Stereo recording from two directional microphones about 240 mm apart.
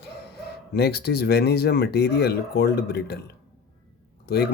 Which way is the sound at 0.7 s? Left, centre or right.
Left.